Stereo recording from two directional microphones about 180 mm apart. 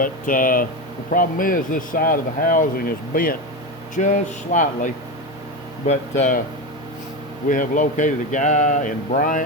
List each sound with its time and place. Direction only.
0.0 s speech: 50° left (ahead or behind)
5.9 s speech: 40° left (ahead or behind)
7.4 s speech: 45° left (ahead or behind)